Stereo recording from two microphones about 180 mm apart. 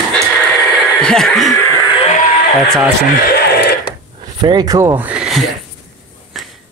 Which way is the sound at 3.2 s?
60° left (ahead or behind).